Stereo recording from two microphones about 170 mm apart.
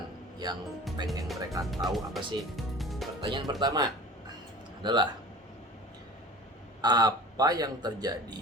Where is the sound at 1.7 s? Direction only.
Centre (ahead or behind).